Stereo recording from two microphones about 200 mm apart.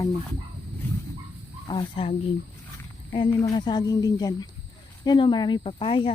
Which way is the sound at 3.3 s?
20° left (ahead or behind).